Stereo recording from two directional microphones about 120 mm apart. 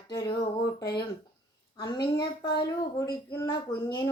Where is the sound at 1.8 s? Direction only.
35° left (ahead or behind).